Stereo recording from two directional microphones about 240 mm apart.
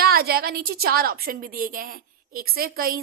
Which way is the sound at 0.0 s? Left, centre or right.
Right.